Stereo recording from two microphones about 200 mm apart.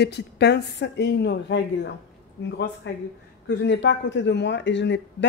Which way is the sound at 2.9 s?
60° left (ahead or behind).